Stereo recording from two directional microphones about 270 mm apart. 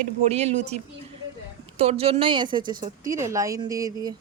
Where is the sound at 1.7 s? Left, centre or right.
Right.